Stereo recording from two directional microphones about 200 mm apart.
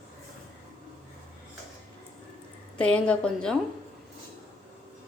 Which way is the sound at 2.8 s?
5° left (ahead or behind).